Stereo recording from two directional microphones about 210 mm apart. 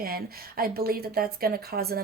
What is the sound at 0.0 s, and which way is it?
Speech, 45° right (ahead or behind).